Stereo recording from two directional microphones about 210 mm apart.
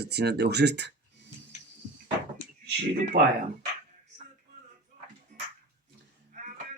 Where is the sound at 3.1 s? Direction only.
45° right (ahead or behind).